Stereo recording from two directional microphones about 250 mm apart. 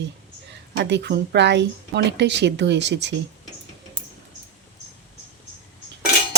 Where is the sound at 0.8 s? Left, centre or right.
Right.